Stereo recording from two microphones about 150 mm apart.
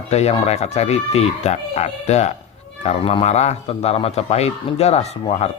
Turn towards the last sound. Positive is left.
turn(degrees=45)  # may be behind; listen again after turning